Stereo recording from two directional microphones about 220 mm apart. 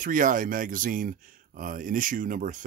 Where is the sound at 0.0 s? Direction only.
35° right (ahead or behind).